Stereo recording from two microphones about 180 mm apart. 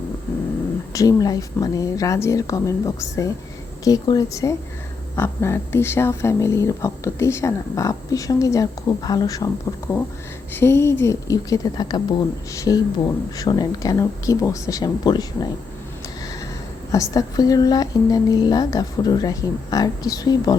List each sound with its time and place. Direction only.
0.9 s speech: 20° left (ahead or behind)
16.9 s speech: 20° left (ahead or behind)